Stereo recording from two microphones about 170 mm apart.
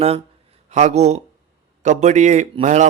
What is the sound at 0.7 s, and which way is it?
A man's voice, 40° right (ahead or behind).